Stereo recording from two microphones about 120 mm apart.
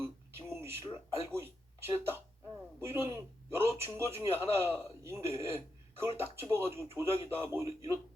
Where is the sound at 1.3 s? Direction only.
20° right (ahead or behind).